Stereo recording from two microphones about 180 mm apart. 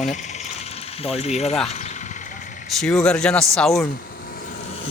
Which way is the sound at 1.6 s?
40° left (ahead or behind).